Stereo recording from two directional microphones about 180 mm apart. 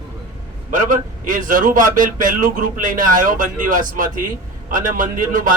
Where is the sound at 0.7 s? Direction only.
50° right (ahead or behind).